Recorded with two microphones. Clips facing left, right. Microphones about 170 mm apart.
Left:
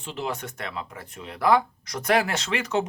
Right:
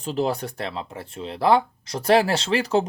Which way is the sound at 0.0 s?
40° right (ahead or behind).